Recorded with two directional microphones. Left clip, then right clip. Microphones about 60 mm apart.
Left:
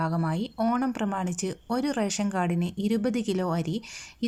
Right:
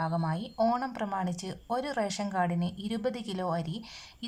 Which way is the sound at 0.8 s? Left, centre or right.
Left.